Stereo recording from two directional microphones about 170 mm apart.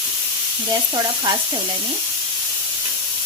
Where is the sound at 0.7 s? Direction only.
20° right (ahead or behind).